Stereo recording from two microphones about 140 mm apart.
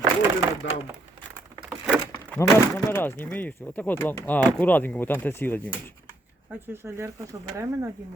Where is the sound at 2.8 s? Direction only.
15° left (ahead or behind).